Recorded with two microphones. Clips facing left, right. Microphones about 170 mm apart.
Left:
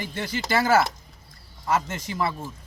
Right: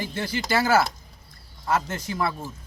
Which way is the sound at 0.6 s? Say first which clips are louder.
Left 1 dB; 10° right (ahead or behind).